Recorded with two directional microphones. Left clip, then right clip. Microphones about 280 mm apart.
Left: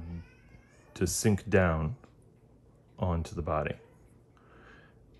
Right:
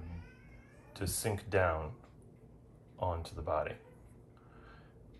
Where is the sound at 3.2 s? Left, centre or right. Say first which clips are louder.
Left 3 dB; left.